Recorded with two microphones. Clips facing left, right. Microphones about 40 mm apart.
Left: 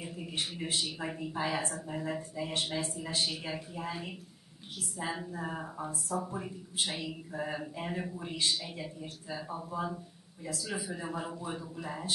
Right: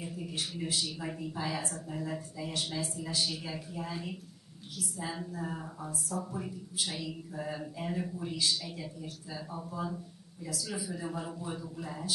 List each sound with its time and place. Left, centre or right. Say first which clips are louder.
0.0 s a man's voice: left 1 dB; centre
3.3 s speech: left 1 dB; left